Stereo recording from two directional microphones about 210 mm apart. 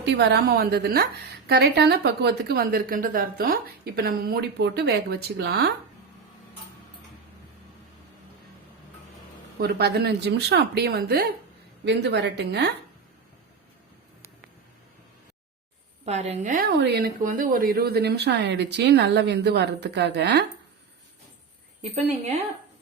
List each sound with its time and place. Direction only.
0.0 s speech: 55° right (ahead or behind)
9.6 s speech: 50° right (ahead or behind)
16.0 s speech: 30° right (ahead or behind); by 20.4 s 55° right (ahead or behind)
21.8 s a woman's voice: 30° right (ahead or behind)